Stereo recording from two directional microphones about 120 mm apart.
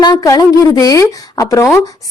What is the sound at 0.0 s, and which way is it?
A woman's voice, 35° left (ahead or behind).